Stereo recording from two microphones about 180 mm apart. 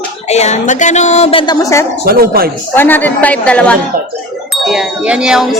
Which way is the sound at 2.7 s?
10° left (ahead or behind).